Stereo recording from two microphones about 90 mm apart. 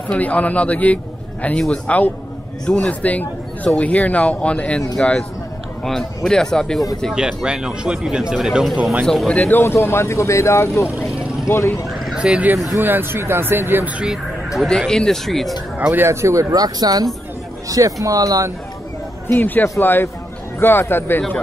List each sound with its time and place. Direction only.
0.1 s speech: 15° left (ahead or behind)
7.2 s speech: 10° right (ahead or behind)
9.3 s speech: 20° left (ahead or behind); by 10.7 s 35° left (ahead or behind)
11.1 s vehicle: 30° left (ahead or behind)
12.0 s a sound: 10° right (ahead or behind)
12.7 s speech: 25° right (ahead or behind)
14.6 s speech: 5° left (ahead or behind)
15.8 s speech: 25° right (ahead or behind)
19.2 s speech: 20° left (ahead or behind)